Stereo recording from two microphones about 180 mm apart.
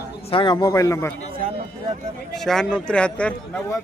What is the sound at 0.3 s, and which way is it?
Speech, 25° left (ahead or behind).